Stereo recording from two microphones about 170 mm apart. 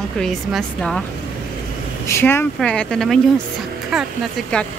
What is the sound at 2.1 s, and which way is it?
Speech, 15° left (ahead or behind).